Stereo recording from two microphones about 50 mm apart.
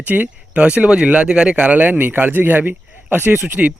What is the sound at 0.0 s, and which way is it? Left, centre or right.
A man's voice, right.